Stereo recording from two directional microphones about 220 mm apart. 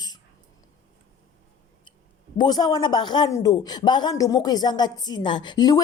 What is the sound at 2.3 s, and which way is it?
Speech, 20° left (ahead or behind).